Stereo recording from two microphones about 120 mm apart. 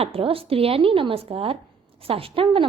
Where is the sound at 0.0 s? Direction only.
50° right (ahead or behind).